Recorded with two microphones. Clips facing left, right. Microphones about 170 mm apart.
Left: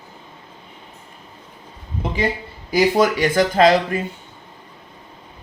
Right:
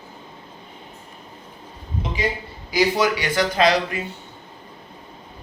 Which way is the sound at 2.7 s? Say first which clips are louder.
Left 3 dB; 45° left (ahead or behind).